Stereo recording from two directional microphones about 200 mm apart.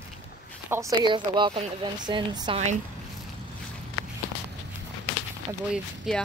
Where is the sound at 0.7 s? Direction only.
10° right (ahead or behind).